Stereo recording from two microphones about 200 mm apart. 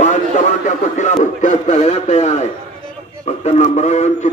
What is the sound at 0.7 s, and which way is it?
A man's voice, 35° left (ahead or behind).